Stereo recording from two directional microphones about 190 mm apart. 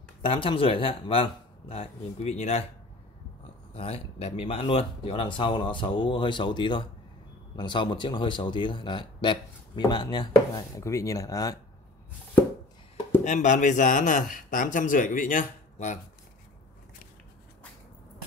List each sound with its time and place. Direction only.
0.2 s speech: 30° left (ahead or behind)
3.7 s speech: 30° left (ahead or behind)
13.2 s speech: 40° left (ahead or behind)